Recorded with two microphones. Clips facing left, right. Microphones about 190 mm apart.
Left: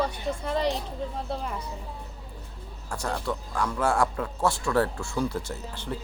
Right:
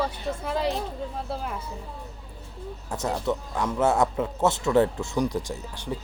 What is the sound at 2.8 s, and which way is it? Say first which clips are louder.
Speech: right 3 dB; 20° right (ahead or behind).